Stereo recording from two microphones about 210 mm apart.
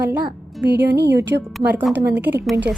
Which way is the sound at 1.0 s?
55° right (ahead or behind).